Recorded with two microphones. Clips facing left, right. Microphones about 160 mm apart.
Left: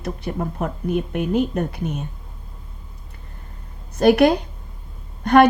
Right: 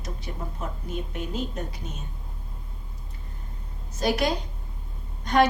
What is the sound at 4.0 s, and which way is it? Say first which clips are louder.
A woman's voice: left 11 dB; 60° left (ahead or behind).